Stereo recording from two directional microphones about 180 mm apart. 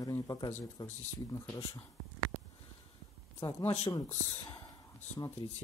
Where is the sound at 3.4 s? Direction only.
20° left (ahead or behind).